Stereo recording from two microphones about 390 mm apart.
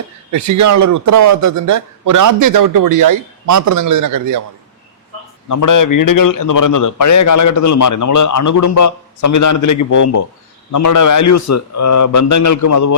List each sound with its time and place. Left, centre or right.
0.3 s speech: right
5.5 s a man's voice: left